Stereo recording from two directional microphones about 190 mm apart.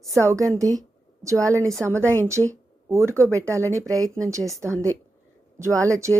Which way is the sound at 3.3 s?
15° right (ahead or behind).